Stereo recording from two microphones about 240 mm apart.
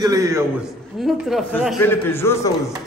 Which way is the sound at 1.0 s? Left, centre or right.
Centre.